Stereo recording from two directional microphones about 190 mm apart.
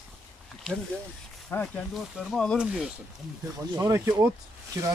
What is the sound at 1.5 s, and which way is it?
Speech, 5° left (ahead or behind).